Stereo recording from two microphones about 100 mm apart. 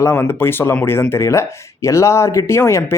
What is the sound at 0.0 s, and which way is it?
Speech, 25° left (ahead or behind).